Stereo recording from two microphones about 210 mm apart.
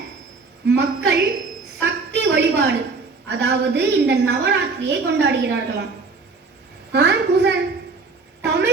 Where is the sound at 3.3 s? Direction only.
55° right (ahead or behind).